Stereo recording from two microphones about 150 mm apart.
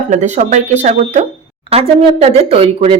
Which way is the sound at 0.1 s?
50° right (ahead or behind).